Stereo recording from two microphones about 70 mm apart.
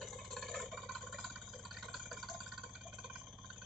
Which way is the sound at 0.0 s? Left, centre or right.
Centre.